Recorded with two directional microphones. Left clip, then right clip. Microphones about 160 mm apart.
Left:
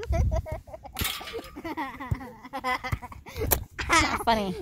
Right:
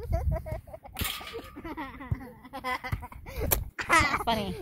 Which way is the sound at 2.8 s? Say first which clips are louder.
Left 3 dB; 40° left (ahead or behind).